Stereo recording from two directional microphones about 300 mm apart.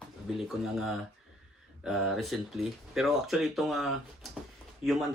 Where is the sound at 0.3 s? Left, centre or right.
Centre.